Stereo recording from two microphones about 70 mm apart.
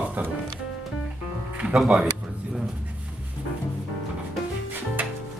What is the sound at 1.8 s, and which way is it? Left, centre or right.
Speech, centre.